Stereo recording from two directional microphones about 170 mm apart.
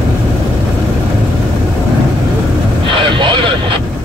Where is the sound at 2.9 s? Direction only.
30° right (ahead or behind).